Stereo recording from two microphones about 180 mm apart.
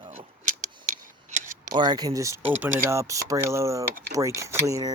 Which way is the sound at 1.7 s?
25° right (ahead or behind).